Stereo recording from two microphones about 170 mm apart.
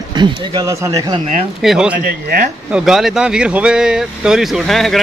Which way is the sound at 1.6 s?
5° right (ahead or behind).